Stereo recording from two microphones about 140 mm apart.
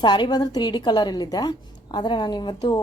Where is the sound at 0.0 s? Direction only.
35° left (ahead or behind).